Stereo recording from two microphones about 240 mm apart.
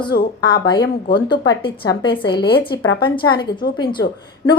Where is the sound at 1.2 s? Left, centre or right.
Centre.